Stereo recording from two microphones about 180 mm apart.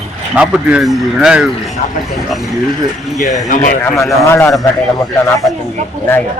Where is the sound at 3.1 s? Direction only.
45° left (ahead or behind).